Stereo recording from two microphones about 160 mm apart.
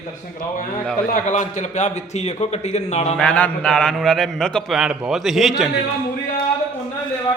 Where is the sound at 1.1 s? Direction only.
50° left (ahead or behind).